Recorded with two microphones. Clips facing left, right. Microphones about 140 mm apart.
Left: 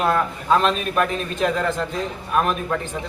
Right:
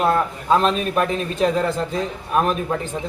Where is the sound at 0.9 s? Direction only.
30° right (ahead or behind).